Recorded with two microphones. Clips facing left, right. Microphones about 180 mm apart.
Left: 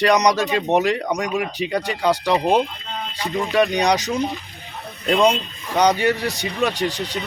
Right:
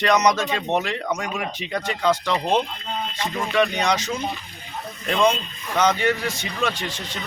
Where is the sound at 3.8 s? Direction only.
40° left (ahead or behind).